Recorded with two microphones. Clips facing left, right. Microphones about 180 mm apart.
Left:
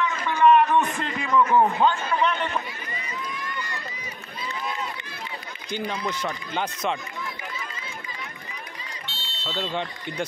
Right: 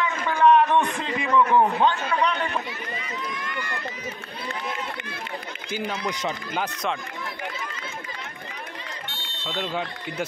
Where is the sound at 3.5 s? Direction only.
55° right (ahead or behind).